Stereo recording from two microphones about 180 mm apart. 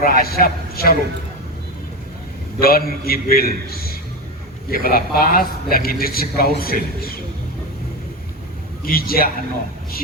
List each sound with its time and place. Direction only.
0.0 s a man's voice: 55° left (ahead or behind)
2.6 s a man's voice: 55° left (ahead or behind)
8.8 s a man's voice: 55° left (ahead or behind)